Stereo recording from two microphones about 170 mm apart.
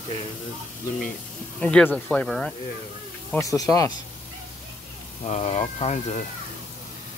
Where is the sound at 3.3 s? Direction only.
20° left (ahead or behind).